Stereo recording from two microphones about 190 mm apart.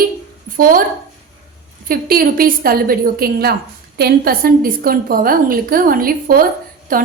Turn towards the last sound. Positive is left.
turn(degrees=-50)  # may be behind; listen again after turning